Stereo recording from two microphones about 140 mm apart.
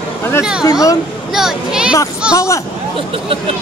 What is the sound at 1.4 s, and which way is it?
Speech, 5° right (ahead or behind).